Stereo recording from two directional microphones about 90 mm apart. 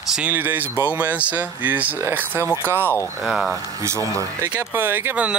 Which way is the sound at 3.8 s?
35° right (ahead or behind).